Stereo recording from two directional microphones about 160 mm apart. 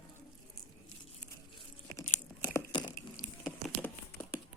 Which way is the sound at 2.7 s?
25° left (ahead or behind).